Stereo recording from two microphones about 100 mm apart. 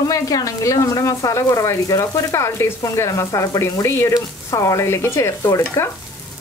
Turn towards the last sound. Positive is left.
turn(degrees=30)  # may be behind; listen again after turning